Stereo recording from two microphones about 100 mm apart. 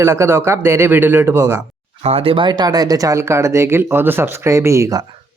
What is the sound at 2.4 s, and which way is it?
Speech, 45° right (ahead or behind).